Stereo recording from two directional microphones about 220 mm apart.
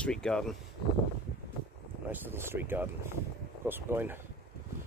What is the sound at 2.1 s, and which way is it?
Speech, 10° right (ahead or behind).